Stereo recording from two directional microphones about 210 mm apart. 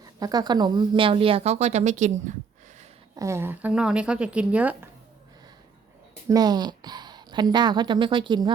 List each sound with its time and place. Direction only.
0.0 s a woman's voice: 20° right (ahead or behind); by 2.3 s 35° right (ahead or behind)
3.2 s speech: 15° right (ahead or behind)
6.2 s a woman's voice: 20° right (ahead or behind)